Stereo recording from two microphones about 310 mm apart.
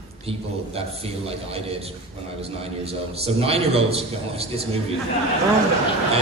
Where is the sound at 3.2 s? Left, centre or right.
Centre.